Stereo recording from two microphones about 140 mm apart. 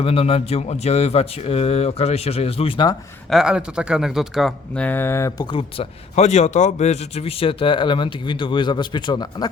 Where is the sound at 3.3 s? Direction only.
5° right (ahead or behind).